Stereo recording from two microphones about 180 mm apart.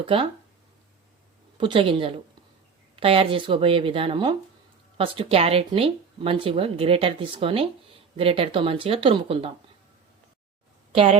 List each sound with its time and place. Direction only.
0.0 s speech: 30° right (ahead or behind)
1.5 s speech: 30° right (ahead or behind)
10.9 s speech: 30° right (ahead or behind)